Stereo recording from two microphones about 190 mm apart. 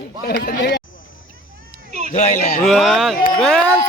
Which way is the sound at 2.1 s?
40° left (ahead or behind).